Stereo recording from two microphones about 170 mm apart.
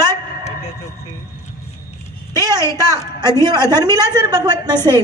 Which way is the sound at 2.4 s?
20° right (ahead or behind).